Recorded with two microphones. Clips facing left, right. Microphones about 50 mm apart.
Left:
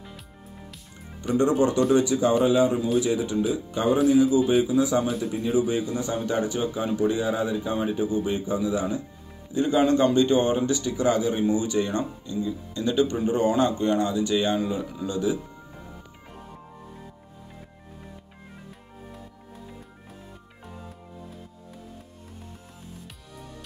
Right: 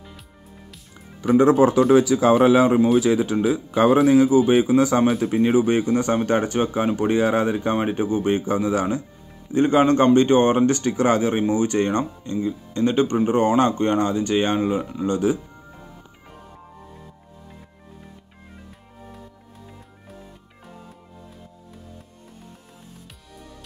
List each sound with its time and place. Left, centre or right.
1.5 s speech: right
9.5 s a man's voice: right